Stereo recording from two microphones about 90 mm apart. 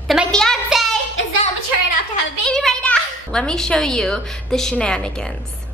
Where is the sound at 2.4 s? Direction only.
5° left (ahead or behind).